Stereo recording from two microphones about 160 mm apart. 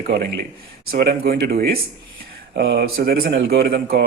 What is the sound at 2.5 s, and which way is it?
Speech, 90° right.